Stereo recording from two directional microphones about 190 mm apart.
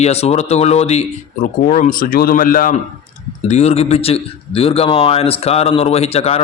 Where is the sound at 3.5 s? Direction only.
35° left (ahead or behind).